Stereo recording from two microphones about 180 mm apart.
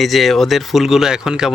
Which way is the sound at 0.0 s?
Centre (ahead or behind).